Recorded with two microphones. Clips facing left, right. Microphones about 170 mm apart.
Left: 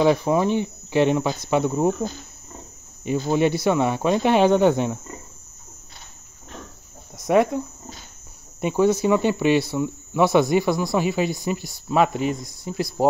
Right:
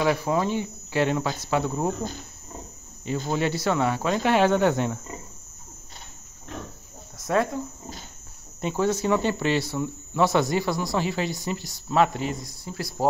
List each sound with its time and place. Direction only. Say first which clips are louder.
0.0 s speech: left 5 dB; 20° left (ahead or behind)
3.1 s speech: left 6 dB; 15° left (ahead or behind)
7.2 s speech: left 6 dB; 15° left (ahead or behind)